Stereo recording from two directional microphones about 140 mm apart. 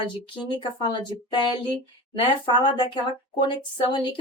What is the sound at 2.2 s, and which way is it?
Speech, 35° left (ahead or behind).